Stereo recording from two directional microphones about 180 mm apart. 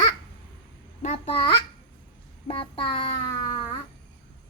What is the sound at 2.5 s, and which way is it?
Child singing, 30° left (ahead or behind).